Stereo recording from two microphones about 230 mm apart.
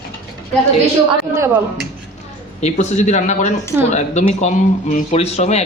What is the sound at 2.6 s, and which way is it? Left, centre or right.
Speech, left.